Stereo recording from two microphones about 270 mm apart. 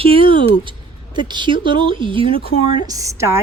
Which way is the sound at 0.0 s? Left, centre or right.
Centre.